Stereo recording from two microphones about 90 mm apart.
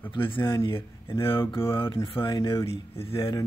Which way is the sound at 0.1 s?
70° left (ahead or behind).